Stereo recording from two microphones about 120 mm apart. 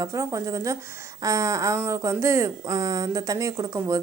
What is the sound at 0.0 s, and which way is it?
Speech, 25° right (ahead or behind).